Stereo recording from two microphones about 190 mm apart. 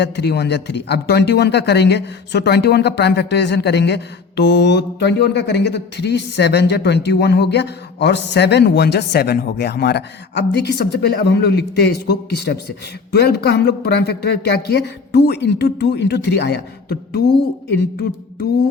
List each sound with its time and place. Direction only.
0.0 s a man's voice: 60° left (ahead or behind)